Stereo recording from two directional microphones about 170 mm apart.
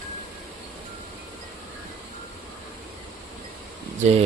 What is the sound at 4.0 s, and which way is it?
Speech, 40° right (ahead or behind).